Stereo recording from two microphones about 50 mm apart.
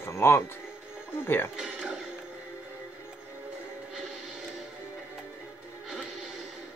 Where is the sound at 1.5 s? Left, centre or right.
Centre.